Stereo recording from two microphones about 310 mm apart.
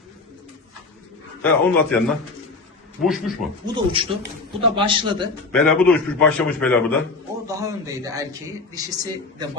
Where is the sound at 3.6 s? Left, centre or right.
Centre.